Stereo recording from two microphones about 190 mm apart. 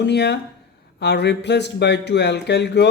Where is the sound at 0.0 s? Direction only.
60° left (ahead or behind).